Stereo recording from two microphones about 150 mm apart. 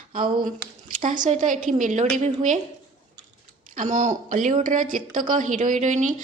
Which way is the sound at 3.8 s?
55° right (ahead or behind).